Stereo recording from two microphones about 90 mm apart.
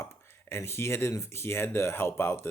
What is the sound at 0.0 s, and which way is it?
Speech, 30° left (ahead or behind).